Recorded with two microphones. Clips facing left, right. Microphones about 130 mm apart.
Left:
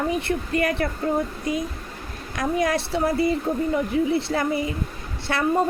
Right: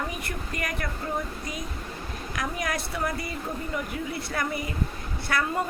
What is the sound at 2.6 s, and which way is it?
Speech, 25° left (ahead or behind).